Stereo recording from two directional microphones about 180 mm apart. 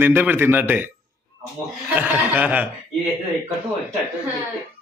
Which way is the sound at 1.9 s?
10° right (ahead or behind).